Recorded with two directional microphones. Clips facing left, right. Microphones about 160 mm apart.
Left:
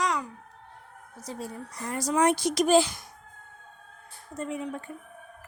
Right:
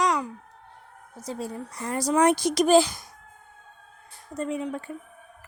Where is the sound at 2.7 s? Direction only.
35° right (ahead or behind).